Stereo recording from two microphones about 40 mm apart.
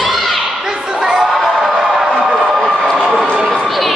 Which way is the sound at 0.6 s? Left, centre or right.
Right.